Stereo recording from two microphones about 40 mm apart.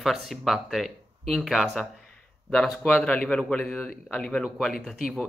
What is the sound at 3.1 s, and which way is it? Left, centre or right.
Speech, left.